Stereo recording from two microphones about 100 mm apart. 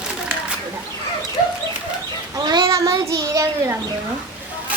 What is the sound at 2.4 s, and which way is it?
Child singing, 45° right (ahead or behind).